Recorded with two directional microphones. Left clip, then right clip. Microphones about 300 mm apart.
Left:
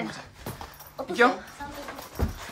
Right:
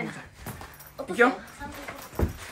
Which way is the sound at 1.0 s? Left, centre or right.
Centre.